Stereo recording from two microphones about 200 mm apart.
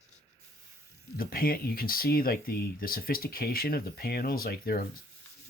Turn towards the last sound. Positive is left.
turn(degrees=50)  # may be behind; listen again after turning